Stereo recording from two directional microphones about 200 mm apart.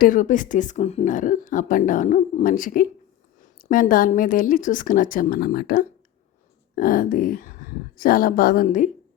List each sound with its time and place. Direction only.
0.0 s a woman's voice: 40° left (ahead or behind)